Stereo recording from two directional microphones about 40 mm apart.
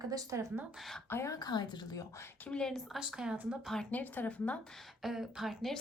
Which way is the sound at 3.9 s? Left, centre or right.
Left.